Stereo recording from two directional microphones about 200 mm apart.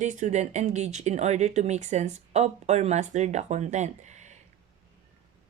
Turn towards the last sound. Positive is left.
turn(degrees=-35)  # may be behind; listen again after turning